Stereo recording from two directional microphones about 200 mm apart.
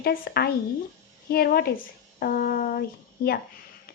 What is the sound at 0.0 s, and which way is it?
Speech, 50° left (ahead or behind).